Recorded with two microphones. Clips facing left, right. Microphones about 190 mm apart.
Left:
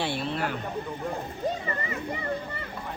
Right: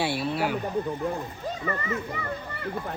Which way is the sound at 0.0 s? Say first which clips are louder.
Right 3 dB; 10° right (ahead or behind).